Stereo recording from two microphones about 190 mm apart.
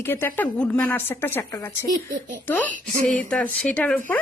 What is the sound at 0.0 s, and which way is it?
A woman's voice, 10° left (ahead or behind).